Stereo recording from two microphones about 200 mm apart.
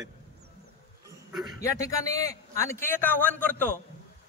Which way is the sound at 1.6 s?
15° left (ahead or behind).